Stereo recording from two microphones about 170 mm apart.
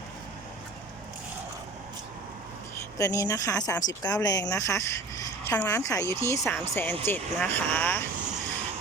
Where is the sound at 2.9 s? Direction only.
20° left (ahead or behind).